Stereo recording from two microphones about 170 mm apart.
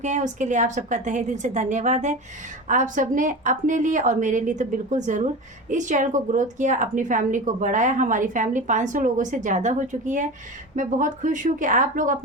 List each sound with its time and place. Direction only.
0.0 s a woman's voice: 45° right (ahead or behind)